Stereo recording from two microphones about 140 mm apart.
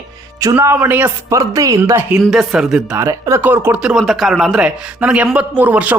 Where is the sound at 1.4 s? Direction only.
25° right (ahead or behind).